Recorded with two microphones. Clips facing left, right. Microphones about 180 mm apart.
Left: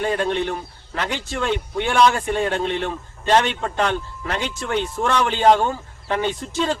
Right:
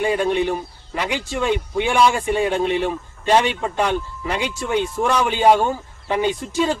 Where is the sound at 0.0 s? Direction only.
10° right (ahead or behind).